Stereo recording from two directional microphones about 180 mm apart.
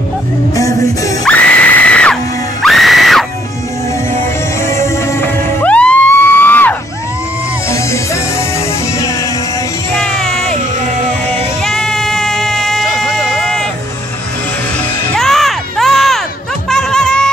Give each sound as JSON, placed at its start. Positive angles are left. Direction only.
{"t": 0.6, "sound": "music", "side_deg": 20}
{"t": 1.2, "sound": "screaming", "side_deg": 10}
{"t": 4.6, "sound": "music", "side_deg": 15}
{"t": 9.9, "sound": "music", "side_deg": 5}
{"t": 11.6, "sound": "music", "side_deg": 0}
{"t": 15.1, "sound": "crowd", "side_deg": 0}
{"t": 16.6, "sound": "music", "side_deg": 0}